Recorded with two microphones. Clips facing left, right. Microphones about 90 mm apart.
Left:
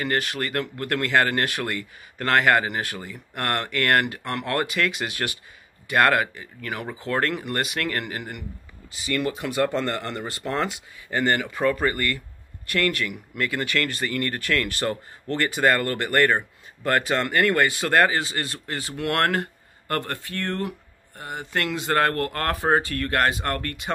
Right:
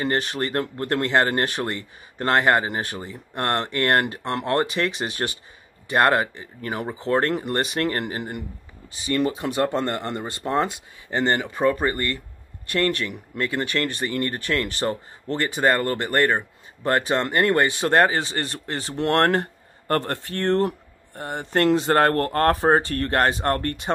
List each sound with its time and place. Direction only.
0.0 s speech: 25° right (ahead or behind)